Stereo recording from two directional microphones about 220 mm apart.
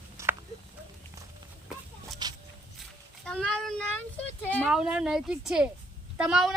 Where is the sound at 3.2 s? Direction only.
5° left (ahead or behind).